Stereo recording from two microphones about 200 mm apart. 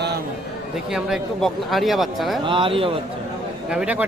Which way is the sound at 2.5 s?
25° right (ahead or behind).